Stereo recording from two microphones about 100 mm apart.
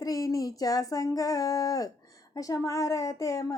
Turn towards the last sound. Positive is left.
turn(degrees=35)  # may be behind; listen again after turning